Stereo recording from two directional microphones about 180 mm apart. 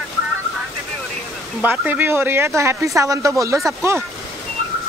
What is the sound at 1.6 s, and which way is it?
Speech, 10° right (ahead or behind).